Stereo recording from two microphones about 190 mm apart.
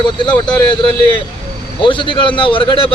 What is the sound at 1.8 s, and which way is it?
A man's voice, 25° left (ahead or behind).